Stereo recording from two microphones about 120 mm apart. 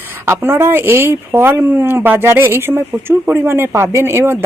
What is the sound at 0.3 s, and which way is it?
Speech, 20° right (ahead or behind).